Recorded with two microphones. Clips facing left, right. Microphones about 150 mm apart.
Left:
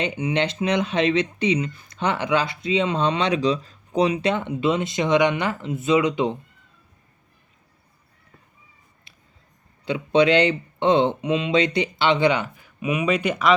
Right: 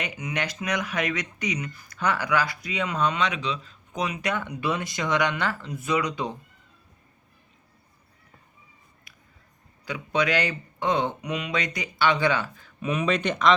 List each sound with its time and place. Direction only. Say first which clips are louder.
0.0 s speech: left 8 dB; 30° left (ahead or behind)
9.1 s a sound: left 1 dB; 30° left (ahead or behind)
9.8 s speech: left 8 dB; 25° left (ahead or behind); by 13.6 s 5° left (ahead or behind)